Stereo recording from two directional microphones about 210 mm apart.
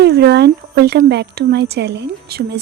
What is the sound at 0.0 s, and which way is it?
Speech, 55° right (ahead or behind).